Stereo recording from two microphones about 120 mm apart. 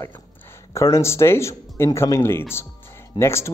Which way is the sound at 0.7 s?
25° left (ahead or behind).